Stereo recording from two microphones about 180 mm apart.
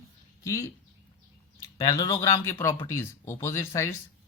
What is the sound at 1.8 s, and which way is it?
Speech, 20° left (ahead or behind).